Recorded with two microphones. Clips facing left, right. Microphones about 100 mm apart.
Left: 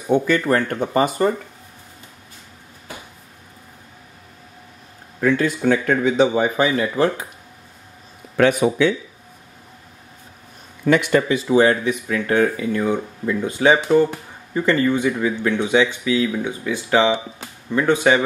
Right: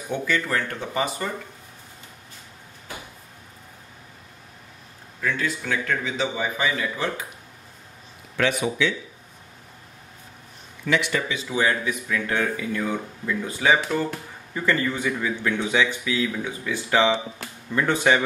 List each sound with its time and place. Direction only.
0.1 s speech: 45° left (ahead or behind)
5.2 s speech: 50° left (ahead or behind)
8.4 s speech: 50° left (ahead or behind)
10.8 s speech: 50° left (ahead or behind)
11.4 s speech: 35° left (ahead or behind)
11.7 s speech: 25° left (ahead or behind)